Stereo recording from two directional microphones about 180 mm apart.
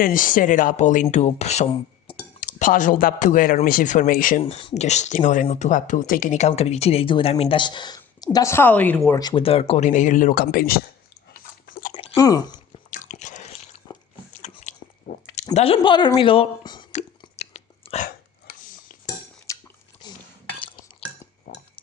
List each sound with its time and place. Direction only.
0.0 s speech: 50° left (ahead or behind)
2.1 s chink: 30° left (ahead or behind)
2.4 s speech: 50° left (ahead or behind)
4.4 s speech: 35° left (ahead or behind); by 9.1 s 10° left (ahead or behind)
9.1 s speech: 25° left (ahead or behind); by 10.8 s 55° left (ahead or behind)
11.3 s biting: 50° left (ahead or behind)
12.1 s a woman's voice: 20° left (ahead or behind)
12.9 s biting: 40° left (ahead or behind)
15.5 s a woman's voice: 30° left (ahead or behind)
17.3 s whispering: 35° left (ahead or behind)
18.4 s a sound: 50° left (ahead or behind)
19.5 s chewing: 15° left (ahead or behind)
21.5 s chink: 60° left (ahead or behind)